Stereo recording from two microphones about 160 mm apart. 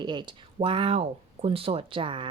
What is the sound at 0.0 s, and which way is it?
Speech, 30° right (ahead or behind).